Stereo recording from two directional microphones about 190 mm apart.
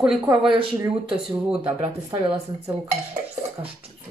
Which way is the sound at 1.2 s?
Centre (ahead or behind).